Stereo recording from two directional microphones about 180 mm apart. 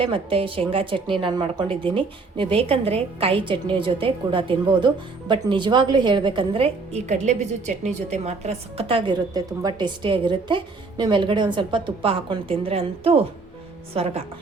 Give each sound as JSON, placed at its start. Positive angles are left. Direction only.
{"t": 0.0, "sound": "a woman's voice", "side_deg": -30}